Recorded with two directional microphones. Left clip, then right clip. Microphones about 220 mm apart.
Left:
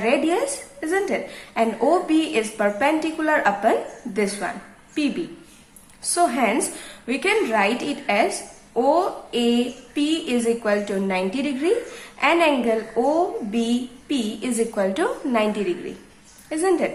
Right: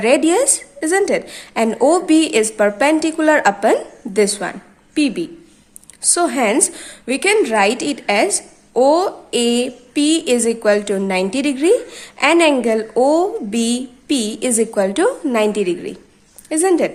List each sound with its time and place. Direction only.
0.0 s a woman's voice: 45° right (ahead or behind)